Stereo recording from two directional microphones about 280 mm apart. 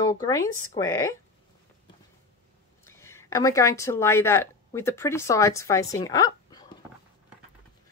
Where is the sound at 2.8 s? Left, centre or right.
Centre.